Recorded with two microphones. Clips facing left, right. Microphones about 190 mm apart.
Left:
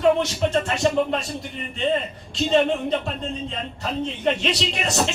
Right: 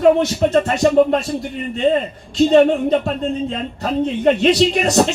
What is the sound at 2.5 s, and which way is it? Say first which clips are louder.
Speech: right 6 dB; 45° right (ahead or behind).